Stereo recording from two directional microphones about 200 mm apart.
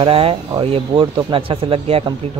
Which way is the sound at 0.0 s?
25° right (ahead or behind).